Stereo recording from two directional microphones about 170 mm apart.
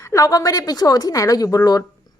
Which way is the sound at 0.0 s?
20° left (ahead or behind).